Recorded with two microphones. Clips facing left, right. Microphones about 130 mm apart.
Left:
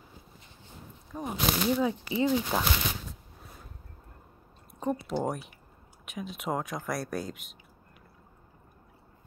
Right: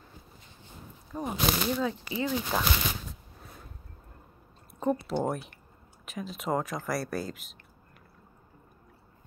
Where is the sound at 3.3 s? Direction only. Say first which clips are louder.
Right 1 dB; 5° left (ahead or behind).